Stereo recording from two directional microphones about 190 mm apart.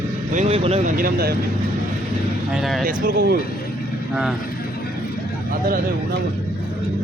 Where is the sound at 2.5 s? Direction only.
Centre (ahead or behind).